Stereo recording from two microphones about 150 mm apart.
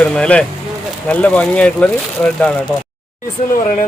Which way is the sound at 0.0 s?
5° left (ahead or behind).